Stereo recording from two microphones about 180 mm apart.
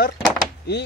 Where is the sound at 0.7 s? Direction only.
70° left (ahead or behind).